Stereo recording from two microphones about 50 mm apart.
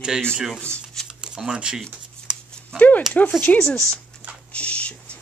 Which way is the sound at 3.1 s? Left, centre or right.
Left.